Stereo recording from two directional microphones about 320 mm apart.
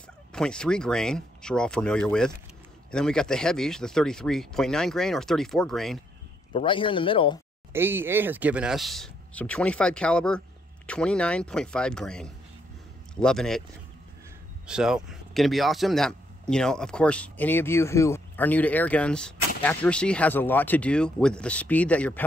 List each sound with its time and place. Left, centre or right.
0.3 s speech: centre
6.5 s speech: centre
7.7 s a man's voice: centre
14.7 s speech: centre